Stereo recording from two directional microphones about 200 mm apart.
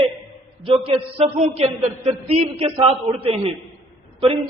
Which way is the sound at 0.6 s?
30° right (ahead or behind).